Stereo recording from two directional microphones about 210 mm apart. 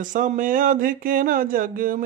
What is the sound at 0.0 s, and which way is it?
Speech, 40° right (ahead or behind).